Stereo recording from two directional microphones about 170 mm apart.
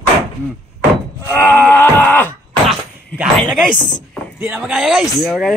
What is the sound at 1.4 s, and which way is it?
Groan, 10° left (ahead or behind).